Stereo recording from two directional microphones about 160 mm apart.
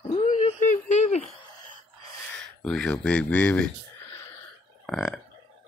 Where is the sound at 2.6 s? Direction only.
5° left (ahead or behind).